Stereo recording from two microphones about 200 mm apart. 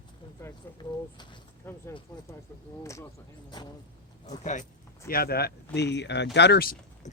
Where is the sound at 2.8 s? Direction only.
15° left (ahead or behind).